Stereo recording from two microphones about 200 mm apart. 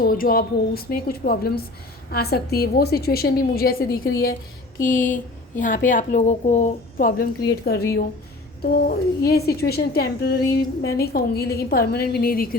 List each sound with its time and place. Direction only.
0.0 s a woman's voice: 45° left (ahead or behind)
7.6 s a woman's voice: 50° left (ahead or behind)